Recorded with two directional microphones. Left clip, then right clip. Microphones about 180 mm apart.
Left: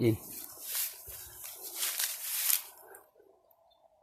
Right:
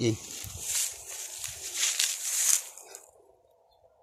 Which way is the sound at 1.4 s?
15° left (ahead or behind).